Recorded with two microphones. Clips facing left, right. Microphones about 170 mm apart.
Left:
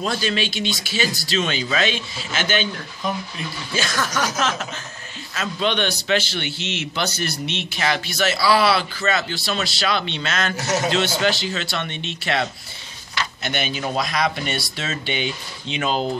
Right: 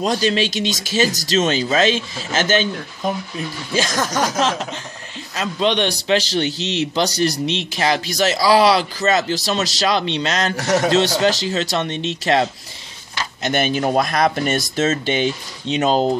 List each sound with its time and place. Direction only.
0.0 s a man's voice: 35° right (ahead or behind)